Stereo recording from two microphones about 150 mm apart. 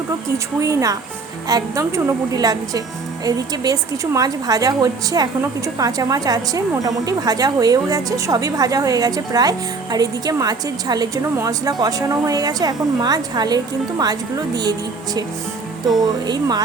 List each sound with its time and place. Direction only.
0.6 s a woman's voice: 20° right (ahead or behind)
16.2 s a woman's voice: 25° right (ahead or behind)